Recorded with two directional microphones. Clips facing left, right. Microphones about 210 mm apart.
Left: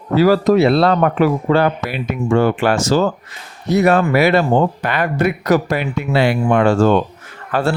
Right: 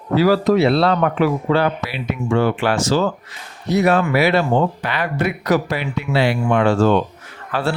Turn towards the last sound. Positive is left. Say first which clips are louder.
# left 3 dB
turn(degrees=45)  # may be behind; listen again after turning